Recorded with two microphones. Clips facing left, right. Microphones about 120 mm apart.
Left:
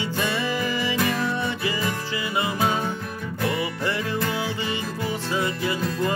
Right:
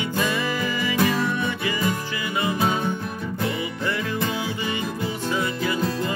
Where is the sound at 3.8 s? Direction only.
30° left (ahead or behind).